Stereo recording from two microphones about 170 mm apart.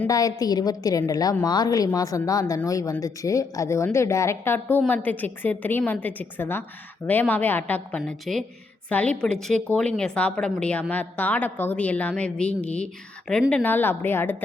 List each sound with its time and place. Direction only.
0.1 s a woman's voice: 20° left (ahead or behind)